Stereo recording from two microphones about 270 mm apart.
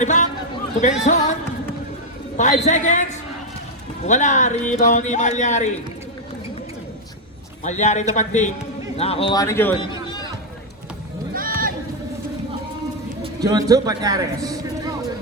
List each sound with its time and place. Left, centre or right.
0.0 s a sound: left
1.1 s speech: left
2.4 s speech: left
7.6 s a man's voice: left
11.3 s run: right
13.4 s a man's voice: centre